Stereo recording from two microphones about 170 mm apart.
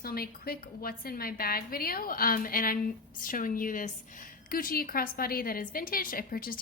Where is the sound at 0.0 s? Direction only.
60° left (ahead or behind).